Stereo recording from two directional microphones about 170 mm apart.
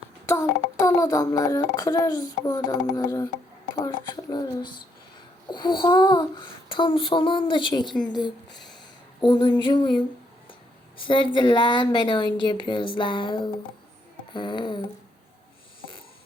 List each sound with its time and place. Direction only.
0.3 s a child's voice: 20° left (ahead or behind)
5.5 s a child's voice: 25° left (ahead or behind)
9.2 s a child's voice: 25° left (ahead or behind)
10.9 s a child's voice: 30° left (ahead or behind)